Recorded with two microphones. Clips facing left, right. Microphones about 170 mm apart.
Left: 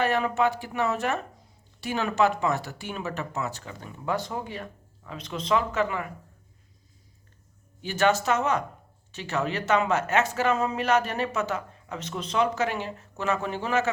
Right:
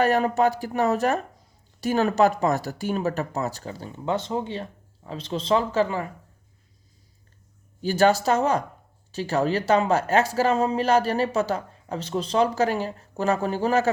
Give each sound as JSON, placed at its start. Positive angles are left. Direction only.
{"t": 0.0, "sound": "speech", "side_deg": -40}
{"t": 7.8, "sound": "speech", "side_deg": -35}